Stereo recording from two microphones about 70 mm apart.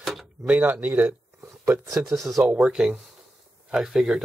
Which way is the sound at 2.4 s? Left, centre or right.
Centre.